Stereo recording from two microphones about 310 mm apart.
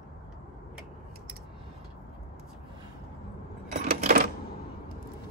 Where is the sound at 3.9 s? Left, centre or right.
Right.